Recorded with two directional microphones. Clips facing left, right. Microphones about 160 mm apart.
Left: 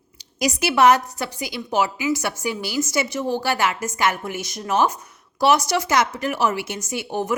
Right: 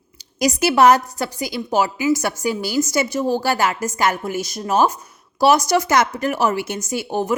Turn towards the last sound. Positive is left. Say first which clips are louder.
# right 3 dB
turn(degrees=-30)  # may be behind; listen again after turning